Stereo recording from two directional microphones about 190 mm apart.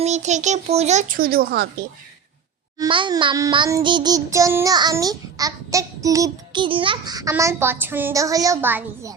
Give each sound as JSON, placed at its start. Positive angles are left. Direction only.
{"t": 0.0, "sound": "a child's voice", "side_deg": -35}
{"t": 2.7, "sound": "child singing", "side_deg": -20}